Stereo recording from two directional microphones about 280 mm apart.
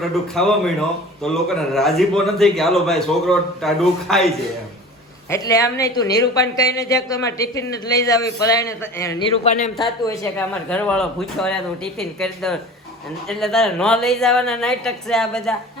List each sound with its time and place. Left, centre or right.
0.0 s a man's voice: centre
9.4 s speech: left
10.0 s a man's voice: centre